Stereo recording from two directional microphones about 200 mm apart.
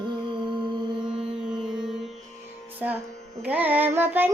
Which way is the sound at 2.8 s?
10° right (ahead or behind).